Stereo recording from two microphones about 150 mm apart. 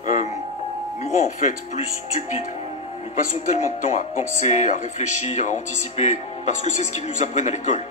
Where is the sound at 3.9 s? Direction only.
55° left (ahead or behind).